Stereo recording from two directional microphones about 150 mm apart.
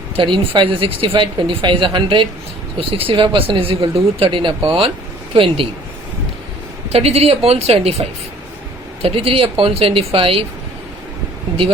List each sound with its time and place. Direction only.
0.2 s speech: 35° right (ahead or behind)
6.9 s speech: 45° right (ahead or behind)